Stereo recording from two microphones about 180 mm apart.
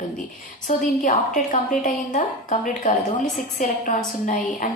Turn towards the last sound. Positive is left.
turn(degrees=45)  # may be behind; listen again after turning